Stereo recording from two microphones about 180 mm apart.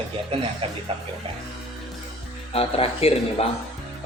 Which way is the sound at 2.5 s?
30° left (ahead or behind).